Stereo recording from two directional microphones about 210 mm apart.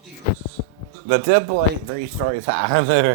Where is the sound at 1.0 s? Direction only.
65° right (ahead or behind).